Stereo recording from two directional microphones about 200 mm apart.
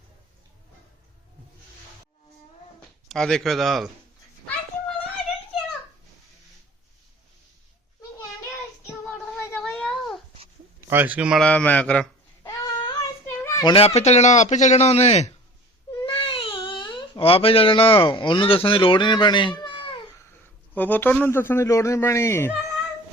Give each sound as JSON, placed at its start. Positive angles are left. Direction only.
{"t": 3.1, "sound": "speech", "side_deg": 5}
{"t": 9.0, "sound": "child singing", "side_deg": 0}
{"t": 9.4, "sound": "a sound", "side_deg": 5}
{"t": 10.8, "sound": "babbling", "side_deg": -10}
{"t": 13.7, "sound": "a man's voice", "side_deg": 30}
{"t": 16.0, "sound": "baby cry", "side_deg": 25}
{"t": 20.7, "sound": "speech", "side_deg": 10}